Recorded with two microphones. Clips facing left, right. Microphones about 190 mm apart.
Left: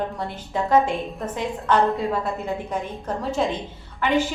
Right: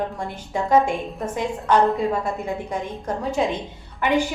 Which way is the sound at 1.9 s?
Centre (ahead or behind).